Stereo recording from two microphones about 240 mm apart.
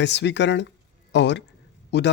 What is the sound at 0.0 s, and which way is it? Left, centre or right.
Speech, left.